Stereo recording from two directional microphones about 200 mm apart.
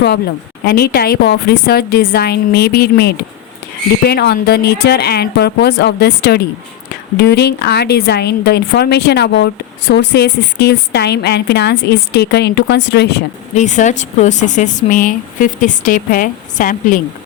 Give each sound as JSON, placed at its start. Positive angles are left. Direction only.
{"t": 0.6, "sound": "a woman's voice", "side_deg": 50}
{"t": 13.6, "sound": "speech", "side_deg": 35}